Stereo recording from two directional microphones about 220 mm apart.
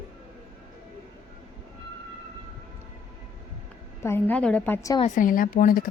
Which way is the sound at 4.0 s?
10° left (ahead or behind).